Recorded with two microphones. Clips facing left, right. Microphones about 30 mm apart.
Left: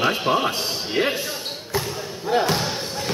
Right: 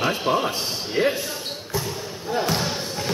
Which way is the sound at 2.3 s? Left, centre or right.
Left.